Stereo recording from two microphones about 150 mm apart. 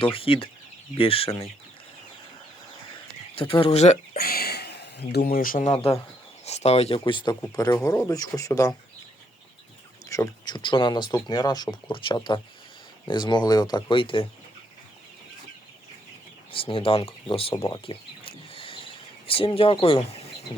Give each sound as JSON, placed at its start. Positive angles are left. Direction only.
{"t": 0.0, "sound": "speech", "side_deg": 35}
{"t": 3.3, "sound": "speech", "side_deg": 35}
{"t": 4.1, "sound": "a sound", "side_deg": 90}
{"t": 5.6, "sound": "speech", "side_deg": 40}
{"t": 10.1, "sound": "speech", "side_deg": 25}
{"t": 16.5, "sound": "speech", "side_deg": 35}
{"t": 17.6, "sound": "a sound", "side_deg": 35}